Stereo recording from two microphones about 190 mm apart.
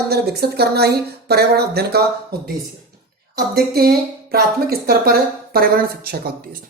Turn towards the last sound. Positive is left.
turn(degrees=-55)  # may be behind; listen again after turning